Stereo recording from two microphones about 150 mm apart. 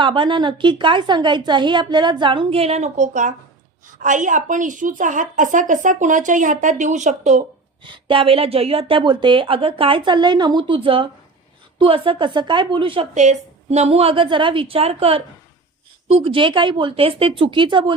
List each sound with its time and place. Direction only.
0.0 s a woman's voice: 35° right (ahead or behind); by 7.4 s 55° right (ahead or behind)
7.9 s a woman's voice: 35° right (ahead or behind)
13.1 s a woman's voice: 50° right (ahead or behind); by 17.9 s 35° right (ahead or behind)